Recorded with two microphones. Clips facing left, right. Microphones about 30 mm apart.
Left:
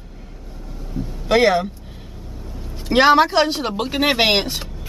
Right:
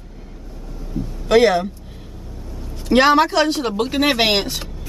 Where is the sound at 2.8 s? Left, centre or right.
Centre.